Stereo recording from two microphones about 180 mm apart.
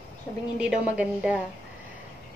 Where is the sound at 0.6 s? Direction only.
5° right (ahead or behind).